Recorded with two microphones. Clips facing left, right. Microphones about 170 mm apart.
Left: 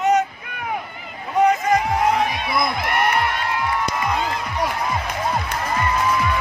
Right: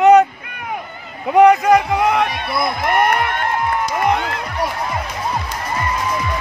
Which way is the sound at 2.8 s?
50° right (ahead or behind).